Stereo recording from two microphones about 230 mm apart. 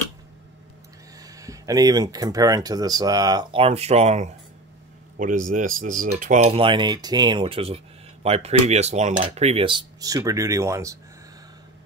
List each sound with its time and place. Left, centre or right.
1.2 s speech: centre